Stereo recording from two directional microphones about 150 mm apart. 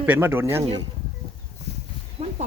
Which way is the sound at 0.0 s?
15° right (ahead or behind).